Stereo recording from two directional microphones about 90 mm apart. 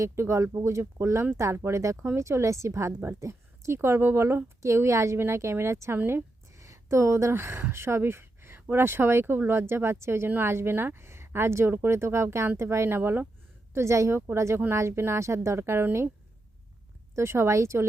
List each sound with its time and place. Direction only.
0.0 s a woman's voice: 35° right (ahead or behind)
17.2 s a woman's voice: 30° right (ahead or behind)